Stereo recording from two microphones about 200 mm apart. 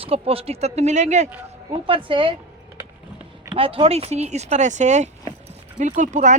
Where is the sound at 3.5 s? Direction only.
25° right (ahead or behind).